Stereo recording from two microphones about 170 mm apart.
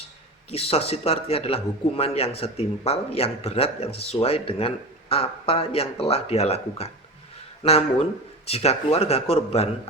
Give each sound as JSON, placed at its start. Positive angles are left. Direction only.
{"t": 0.5, "sound": "a man's voice", "side_deg": 35}